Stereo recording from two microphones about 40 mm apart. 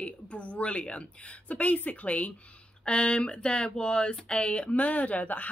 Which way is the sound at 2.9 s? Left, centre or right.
Left.